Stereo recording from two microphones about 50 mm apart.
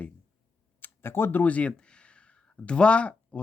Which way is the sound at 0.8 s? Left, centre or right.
Left.